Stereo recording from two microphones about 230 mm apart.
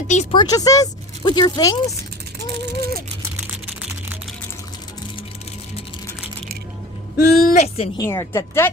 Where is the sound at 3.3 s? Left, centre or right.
Centre.